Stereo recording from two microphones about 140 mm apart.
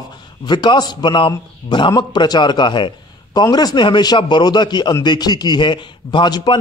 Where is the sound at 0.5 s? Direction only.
30° left (ahead or behind).